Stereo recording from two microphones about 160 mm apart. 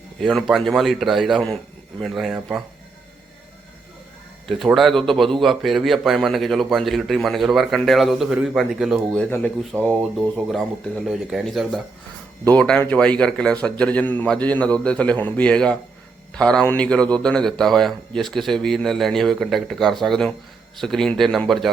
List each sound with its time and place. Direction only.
0.2 s a man's voice: centre (ahead or behind)
4.4 s a man's voice: centre (ahead or behind)
9.1 s a man's voice: 10° left (ahead or behind)
9.7 s speech: 15° right (ahead or behind)
10.2 s a man's voice: centre (ahead or behind)